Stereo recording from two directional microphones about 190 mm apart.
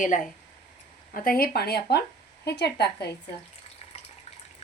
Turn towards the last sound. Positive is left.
turn(degrees=60)  # may be behind; listen again after turning